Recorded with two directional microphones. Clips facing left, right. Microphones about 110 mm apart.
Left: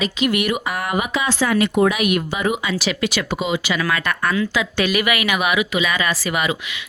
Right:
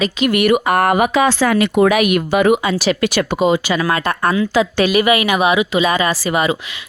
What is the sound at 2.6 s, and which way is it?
Speech, 40° right (ahead or behind).